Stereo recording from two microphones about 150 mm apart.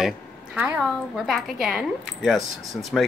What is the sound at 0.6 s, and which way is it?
Speech, 10° right (ahead or behind).